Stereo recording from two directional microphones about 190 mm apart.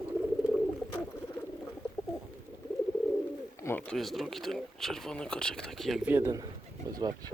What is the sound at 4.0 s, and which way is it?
Speech, centre (ahead or behind).